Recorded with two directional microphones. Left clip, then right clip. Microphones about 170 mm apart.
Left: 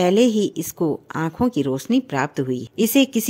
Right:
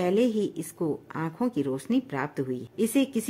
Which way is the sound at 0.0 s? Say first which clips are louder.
Left 8 dB; 35° left (ahead or behind).